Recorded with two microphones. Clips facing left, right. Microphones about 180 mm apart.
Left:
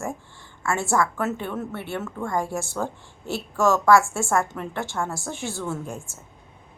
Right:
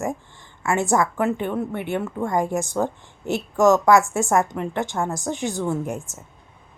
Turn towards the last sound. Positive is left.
turn(degrees=-20)  # may be behind; listen again after turning